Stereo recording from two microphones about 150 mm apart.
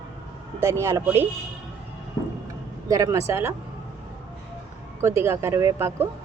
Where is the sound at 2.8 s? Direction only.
25° right (ahead or behind).